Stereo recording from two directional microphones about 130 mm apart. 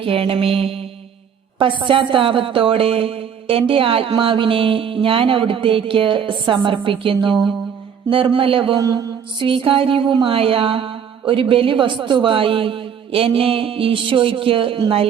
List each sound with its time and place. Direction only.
0.0 s speech: 45° right (ahead or behind)
8.8 s mantra: 30° right (ahead or behind)
9.5 s speech: 45° right (ahead or behind)